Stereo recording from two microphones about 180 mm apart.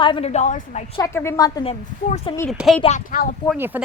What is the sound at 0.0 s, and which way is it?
Speech, 30° left (ahead or behind).